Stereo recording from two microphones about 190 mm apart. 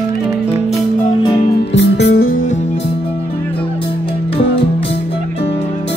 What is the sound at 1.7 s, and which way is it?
Music, 70° left (ahead or behind).